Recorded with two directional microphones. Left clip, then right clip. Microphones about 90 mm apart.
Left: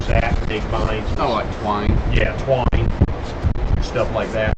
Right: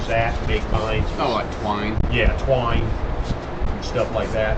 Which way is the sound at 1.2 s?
45° right (ahead or behind).